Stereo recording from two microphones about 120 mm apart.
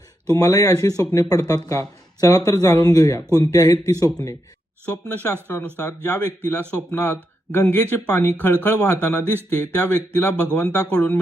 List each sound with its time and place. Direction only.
0.3 s speech: 25° left (ahead or behind)
4.9 s speech: 15° left (ahead or behind)